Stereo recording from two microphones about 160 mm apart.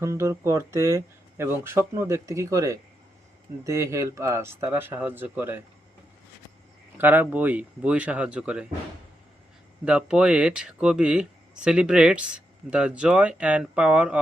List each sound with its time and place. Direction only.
0.0 s speech: 15° right (ahead or behind)
7.0 s speech: 10° right (ahead or behind)
9.8 s speech: 5° right (ahead or behind)